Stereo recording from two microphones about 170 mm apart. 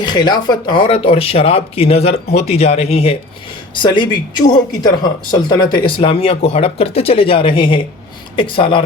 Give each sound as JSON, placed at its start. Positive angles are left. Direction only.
{"t": 0.0, "sound": "speech", "side_deg": 25}